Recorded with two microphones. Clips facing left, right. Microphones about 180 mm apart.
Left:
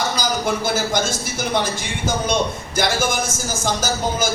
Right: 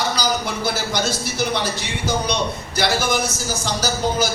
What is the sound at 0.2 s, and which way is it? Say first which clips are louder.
A man's voice: left 1 dB; 50° left (ahead or behind).